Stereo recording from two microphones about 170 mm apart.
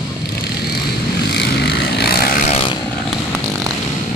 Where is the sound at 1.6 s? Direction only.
70° left (ahead or behind).